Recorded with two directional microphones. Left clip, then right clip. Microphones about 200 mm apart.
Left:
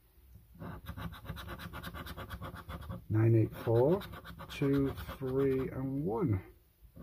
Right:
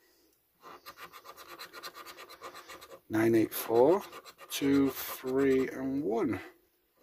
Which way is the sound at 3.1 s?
45° right (ahead or behind).